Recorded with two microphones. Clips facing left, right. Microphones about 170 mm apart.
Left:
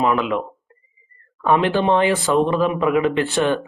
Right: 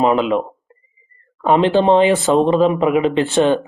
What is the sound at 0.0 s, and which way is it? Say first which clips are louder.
Speech: right 4 dB; 25° right (ahead or behind).